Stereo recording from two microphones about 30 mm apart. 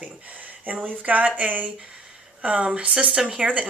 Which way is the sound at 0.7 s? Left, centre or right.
Right.